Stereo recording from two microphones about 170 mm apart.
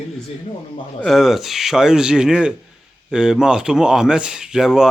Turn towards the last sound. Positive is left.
turn(degrees=-5)  # may be behind; listen again after turning